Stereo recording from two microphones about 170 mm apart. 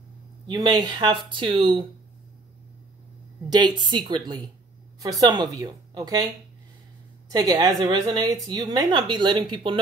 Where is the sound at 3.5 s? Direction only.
25° right (ahead or behind).